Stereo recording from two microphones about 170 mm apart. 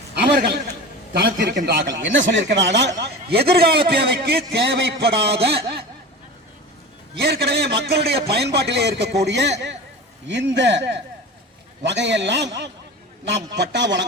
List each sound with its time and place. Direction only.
0.1 s a sound: 75° right (ahead or behind)
1.1 s a man's voice: 65° right (ahead or behind)
2.0 s a man's voice: 90° right
3.0 s a man's voice: 70° right (ahead or behind)
7.2 s a man's voice: 70° right (ahead or behind); by 14.1 s 90° right